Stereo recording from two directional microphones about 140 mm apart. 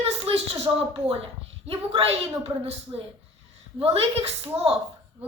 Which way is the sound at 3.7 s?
45° right (ahead or behind).